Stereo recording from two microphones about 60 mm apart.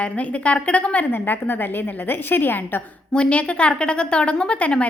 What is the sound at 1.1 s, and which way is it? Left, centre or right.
A woman's voice, left.